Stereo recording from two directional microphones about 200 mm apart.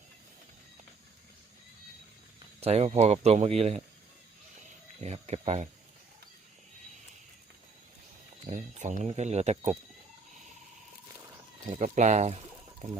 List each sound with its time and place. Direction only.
2.6 s speech: 30° right (ahead or behind)
4.9 s a sound: 35° right (ahead or behind)
8.4 s speech: 35° right (ahead or behind)
11.7 s speech: 35° right (ahead or behind)